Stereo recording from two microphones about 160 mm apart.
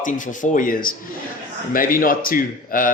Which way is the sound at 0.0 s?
55° left (ahead or behind).